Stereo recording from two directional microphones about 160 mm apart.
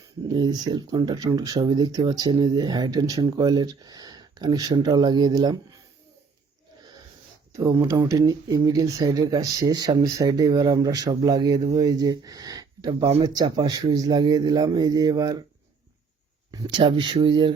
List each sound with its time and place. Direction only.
0.3 s speech: 25° right (ahead or behind)
7.5 s speech: 20° right (ahead or behind)
16.5 s speech: 25° right (ahead or behind)